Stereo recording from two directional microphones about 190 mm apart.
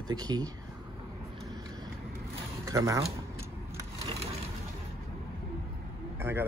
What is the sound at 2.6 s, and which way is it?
Speech, 15° right (ahead or behind).